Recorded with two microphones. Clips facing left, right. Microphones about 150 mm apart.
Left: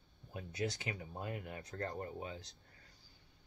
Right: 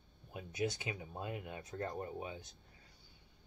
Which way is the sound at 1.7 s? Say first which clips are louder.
Right 1 dB; 10° right (ahead or behind).